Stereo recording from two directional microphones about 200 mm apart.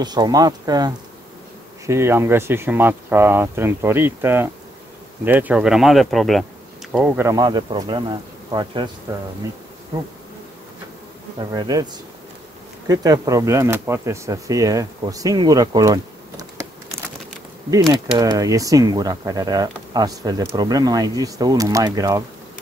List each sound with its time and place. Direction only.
0.0 s speech: 20° right (ahead or behind)
11.3 s speech: 20° right (ahead or behind)
17.6 s speech: 15° right (ahead or behind)